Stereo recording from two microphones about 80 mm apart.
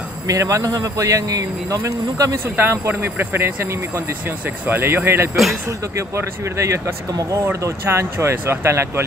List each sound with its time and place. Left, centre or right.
0.3 s a man's voice: right
2.4 s speech: right